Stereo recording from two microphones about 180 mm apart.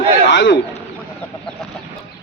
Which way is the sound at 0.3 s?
85° left.